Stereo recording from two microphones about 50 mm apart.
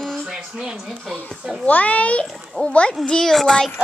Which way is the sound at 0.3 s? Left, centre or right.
Centre.